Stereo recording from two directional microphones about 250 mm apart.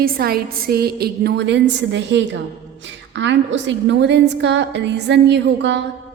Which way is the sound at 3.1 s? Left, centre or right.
Right.